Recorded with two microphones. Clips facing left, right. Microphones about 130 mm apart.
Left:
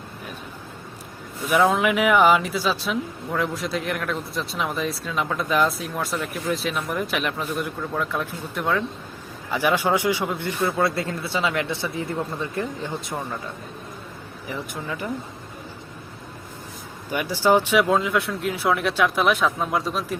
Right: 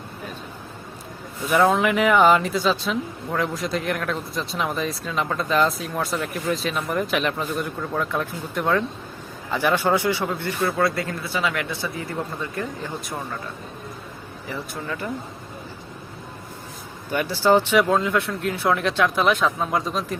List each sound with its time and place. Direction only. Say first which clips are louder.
1.5 s speech: right 1 dB; centre (ahead or behind); by 13.2 s 20° left (ahead or behind)
14.4 s speech: even; 15° left (ahead or behind)
17.1 s speech: right 1 dB; 10° left (ahead or behind)